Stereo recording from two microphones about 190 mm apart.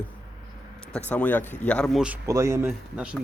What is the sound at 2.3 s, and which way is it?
Speech, 15° right (ahead or behind).